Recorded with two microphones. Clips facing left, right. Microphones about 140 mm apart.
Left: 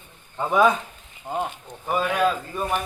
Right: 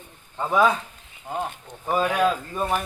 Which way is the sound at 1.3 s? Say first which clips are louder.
Left 2 dB; 25° left (ahead or behind).